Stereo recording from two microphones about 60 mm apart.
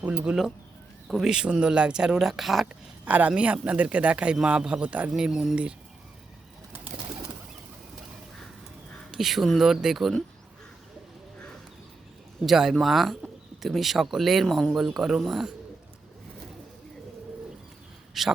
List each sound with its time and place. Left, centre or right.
0.0 s a man's voice: right
1.0 s speech: centre
1.3 s speech: centre
3.0 s a man's voice: right
5.1 s speech: centre
9.1 s speech: centre
12.5 s speech: centre
14.4 s speech: centre
14.7 s speech: centre
18.2 s speech: centre